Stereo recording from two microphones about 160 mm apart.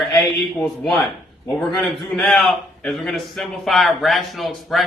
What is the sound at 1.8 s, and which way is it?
A man's voice, 10° left (ahead or behind).